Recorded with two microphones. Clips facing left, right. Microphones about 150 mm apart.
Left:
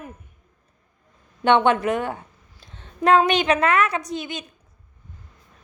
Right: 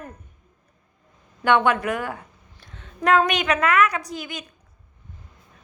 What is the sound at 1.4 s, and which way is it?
Child singing, 25° left (ahead or behind).